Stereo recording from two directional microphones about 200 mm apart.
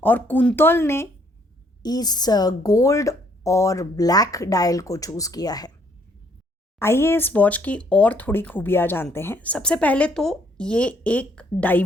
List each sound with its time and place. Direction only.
0.0 s speech: 10° left (ahead or behind)
6.7 s speech: 10° left (ahead or behind)